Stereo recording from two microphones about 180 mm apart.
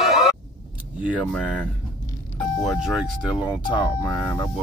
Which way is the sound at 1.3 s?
10° left (ahead or behind).